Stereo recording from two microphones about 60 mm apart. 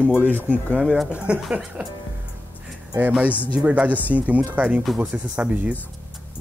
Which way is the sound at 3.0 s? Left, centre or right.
Right.